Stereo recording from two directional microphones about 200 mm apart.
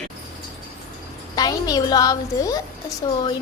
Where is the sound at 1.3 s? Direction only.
20° left (ahead or behind).